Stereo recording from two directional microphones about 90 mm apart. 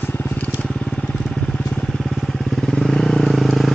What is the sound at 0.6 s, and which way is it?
Vehicle, 5° left (ahead or behind).